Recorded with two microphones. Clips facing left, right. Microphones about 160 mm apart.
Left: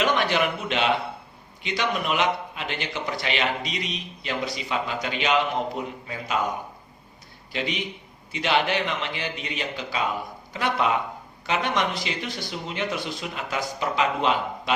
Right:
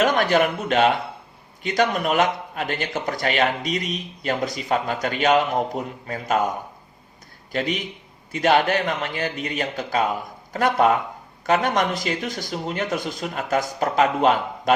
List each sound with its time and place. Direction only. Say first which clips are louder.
0.0 s a man's voice: right 4 dB; 45° right (ahead or behind)
7.5 s a man's voice: right 4 dB; 45° right (ahead or behind)